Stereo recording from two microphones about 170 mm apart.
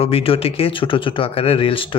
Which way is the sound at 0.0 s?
35° left (ahead or behind).